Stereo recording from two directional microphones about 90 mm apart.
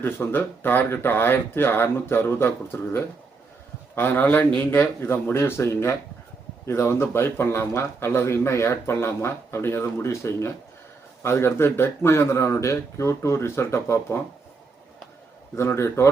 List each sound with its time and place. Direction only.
0.0 s speech: 25° left (ahead or behind)
15.5 s speech: 30° left (ahead or behind)